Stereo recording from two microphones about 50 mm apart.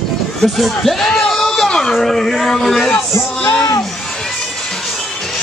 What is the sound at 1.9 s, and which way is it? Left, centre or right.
Speech, centre.